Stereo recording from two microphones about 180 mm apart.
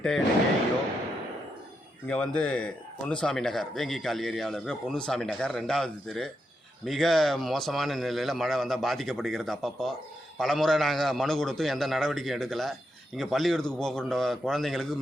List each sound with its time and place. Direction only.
2.0 s speech: 5° left (ahead or behind)